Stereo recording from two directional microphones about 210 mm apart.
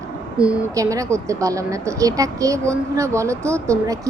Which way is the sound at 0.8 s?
15° right (ahead or behind).